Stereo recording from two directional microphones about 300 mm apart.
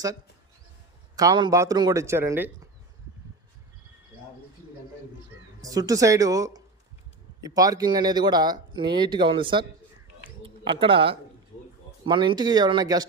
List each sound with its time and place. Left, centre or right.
1.1 s speech: centre
5.6 s speech: centre